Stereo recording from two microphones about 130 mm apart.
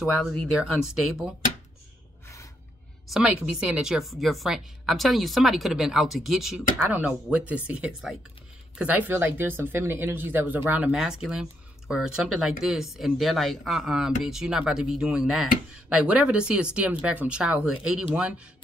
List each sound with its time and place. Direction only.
0.2 s speech: 10° left (ahead or behind)
0.6 s a woman's voice: 5° right (ahead or behind)
2.2 s gasp: 25° left (ahead or behind)
3.1 s a woman's voice: 5° right (ahead or behind)